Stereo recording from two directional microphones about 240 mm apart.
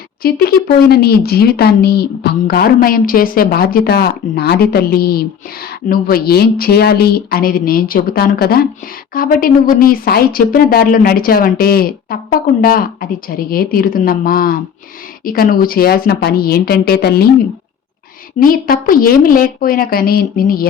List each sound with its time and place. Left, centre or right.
0.2 s speech: left
18.3 s speech: left